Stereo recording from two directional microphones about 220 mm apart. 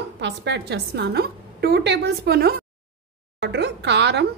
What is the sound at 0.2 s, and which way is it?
Speech, 50° right (ahead or behind).